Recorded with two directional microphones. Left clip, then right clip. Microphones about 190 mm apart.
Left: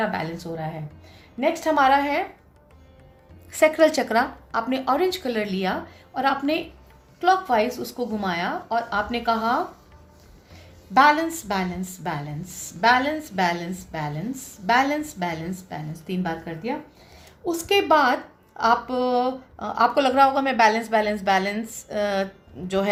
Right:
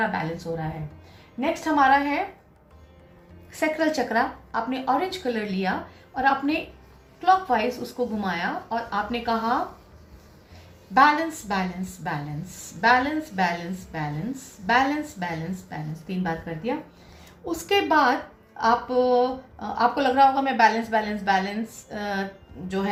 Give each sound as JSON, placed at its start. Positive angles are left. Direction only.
{"t": 0.0, "sound": "a woman's voice", "side_deg": 55}
{"t": 3.5, "sound": "a woman's voice", "side_deg": 55}
{"t": 10.9, "sound": "a woman's voice", "side_deg": 55}